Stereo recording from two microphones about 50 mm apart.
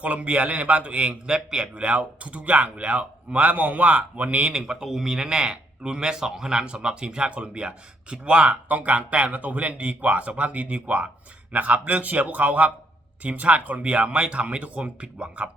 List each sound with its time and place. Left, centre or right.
0.0 s speech: right
1.5 s speech: centre
4.5 s speech: centre